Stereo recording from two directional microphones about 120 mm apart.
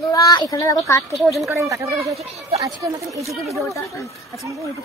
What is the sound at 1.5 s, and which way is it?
Speech, 25° right (ahead or behind).